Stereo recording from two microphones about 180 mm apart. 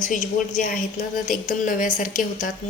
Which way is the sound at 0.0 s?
45° left (ahead or behind).